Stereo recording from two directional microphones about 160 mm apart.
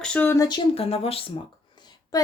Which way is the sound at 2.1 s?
20° left (ahead or behind).